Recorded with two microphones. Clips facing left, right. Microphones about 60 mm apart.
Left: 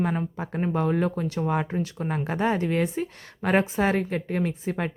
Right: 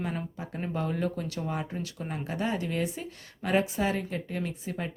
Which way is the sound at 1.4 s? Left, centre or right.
Left.